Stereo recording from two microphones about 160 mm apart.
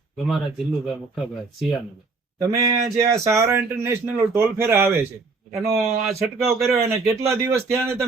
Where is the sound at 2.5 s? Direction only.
20° right (ahead or behind).